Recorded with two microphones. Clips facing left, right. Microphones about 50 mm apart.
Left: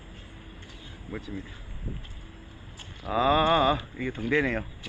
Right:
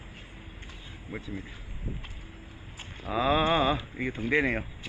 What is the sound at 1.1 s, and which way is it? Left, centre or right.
Speech, centre.